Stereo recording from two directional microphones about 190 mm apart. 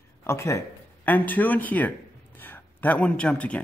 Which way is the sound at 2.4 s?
10° left (ahead or behind).